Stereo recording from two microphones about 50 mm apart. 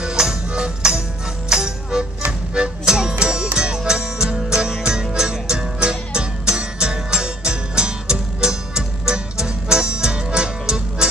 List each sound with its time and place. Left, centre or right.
0.0 s music: centre